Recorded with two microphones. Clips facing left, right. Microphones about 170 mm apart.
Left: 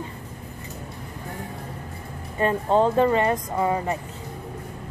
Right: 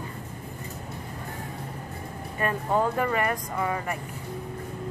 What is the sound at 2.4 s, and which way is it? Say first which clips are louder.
Speech: left 5 dB; 25° left (ahead or behind).